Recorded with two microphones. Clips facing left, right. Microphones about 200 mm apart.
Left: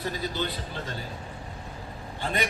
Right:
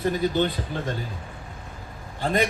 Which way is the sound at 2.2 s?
40° right (ahead or behind).